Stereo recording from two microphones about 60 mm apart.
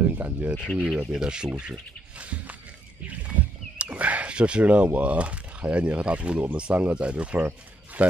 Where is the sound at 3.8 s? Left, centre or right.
Right.